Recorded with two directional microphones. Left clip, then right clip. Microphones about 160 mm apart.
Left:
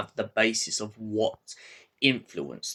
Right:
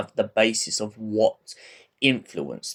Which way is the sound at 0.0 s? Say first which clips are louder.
Right 4 dB; 40° right (ahead or behind).